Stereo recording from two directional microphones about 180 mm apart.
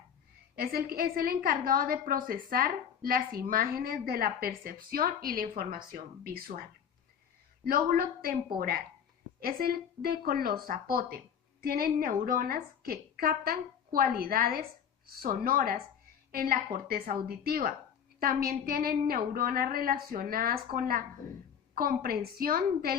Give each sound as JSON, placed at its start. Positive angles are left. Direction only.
{"t": 0.5, "sound": "a woman's voice", "side_deg": -55}